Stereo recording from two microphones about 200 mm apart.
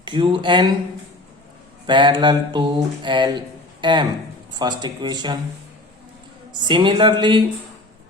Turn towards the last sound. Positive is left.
turn(degrees=-20)  # may be behind; listen again after turning